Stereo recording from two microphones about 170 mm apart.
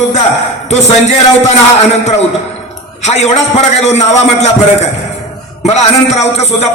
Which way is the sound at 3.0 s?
40° left (ahead or behind).